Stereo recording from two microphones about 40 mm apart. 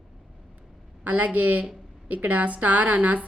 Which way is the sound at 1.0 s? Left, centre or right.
Right.